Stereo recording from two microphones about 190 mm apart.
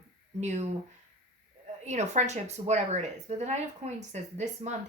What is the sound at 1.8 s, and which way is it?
Speech, 35° right (ahead or behind).